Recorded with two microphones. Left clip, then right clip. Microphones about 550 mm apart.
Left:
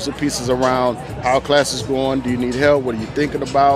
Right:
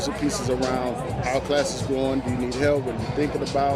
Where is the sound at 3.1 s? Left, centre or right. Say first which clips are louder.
Left 8 dB; left.